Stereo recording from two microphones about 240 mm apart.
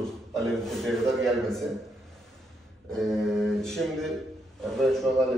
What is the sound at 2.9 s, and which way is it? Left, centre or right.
A man's voice, centre.